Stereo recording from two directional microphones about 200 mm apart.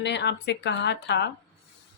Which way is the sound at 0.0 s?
60° left (ahead or behind).